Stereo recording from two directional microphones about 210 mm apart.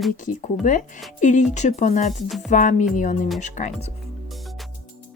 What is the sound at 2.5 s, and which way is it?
Speech, 35° left (ahead or behind).